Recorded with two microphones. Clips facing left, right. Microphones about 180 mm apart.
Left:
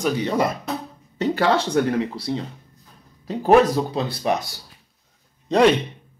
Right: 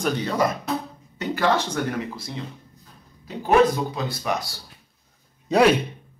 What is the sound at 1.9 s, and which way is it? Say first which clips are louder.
Speech: left 6 dB; 30° left (ahead or behind).